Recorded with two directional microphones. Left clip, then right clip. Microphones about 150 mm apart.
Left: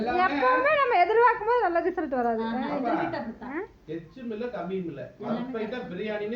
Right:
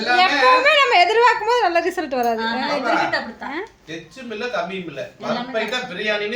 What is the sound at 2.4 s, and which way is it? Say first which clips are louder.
A woman's voice: right 8 dB; 35° right (ahead or behind).